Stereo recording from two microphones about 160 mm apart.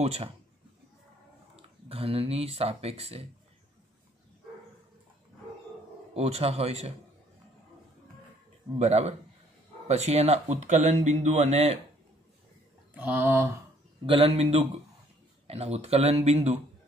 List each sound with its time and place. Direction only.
0.0 s speech: 40° right (ahead or behind)
1.6 s speech: 35° right (ahead or behind)
6.1 s speech: 40° right (ahead or behind)
8.7 s speech: 45° right (ahead or behind)
12.9 s speech: 10° right (ahead or behind)
14.0 s speech: 35° right (ahead or behind)